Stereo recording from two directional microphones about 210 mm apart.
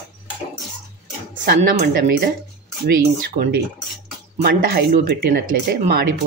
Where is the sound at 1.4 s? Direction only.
45° right (ahead or behind).